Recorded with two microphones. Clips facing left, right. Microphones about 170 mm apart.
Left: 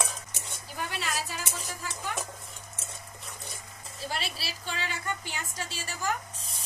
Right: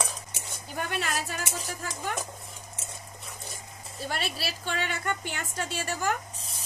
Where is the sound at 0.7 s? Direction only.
50° right (ahead or behind).